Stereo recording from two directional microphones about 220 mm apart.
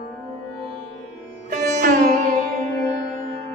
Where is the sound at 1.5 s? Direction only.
35° right (ahead or behind).